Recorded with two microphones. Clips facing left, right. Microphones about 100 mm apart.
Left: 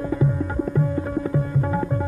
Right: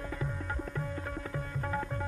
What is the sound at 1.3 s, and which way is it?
Tabla, 15° left (ahead or behind).